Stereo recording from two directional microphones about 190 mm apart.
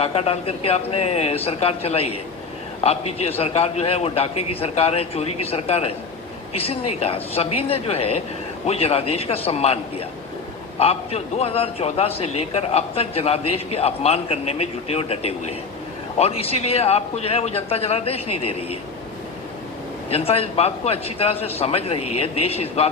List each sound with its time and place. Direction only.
0.0 s a man's voice: 30° left (ahead or behind)
20.1 s a man's voice: 30° left (ahead or behind)